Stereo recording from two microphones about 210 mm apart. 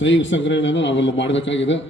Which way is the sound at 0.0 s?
60° left (ahead or behind).